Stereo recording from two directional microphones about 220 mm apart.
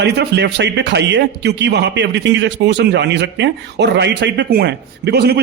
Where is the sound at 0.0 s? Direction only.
50° right (ahead or behind).